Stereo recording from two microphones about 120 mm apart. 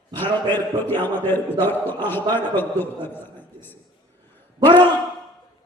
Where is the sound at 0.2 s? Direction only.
15° left (ahead or behind).